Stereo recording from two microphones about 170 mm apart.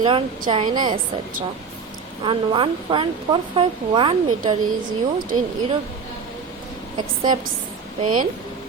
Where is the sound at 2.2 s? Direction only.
30° right (ahead or behind).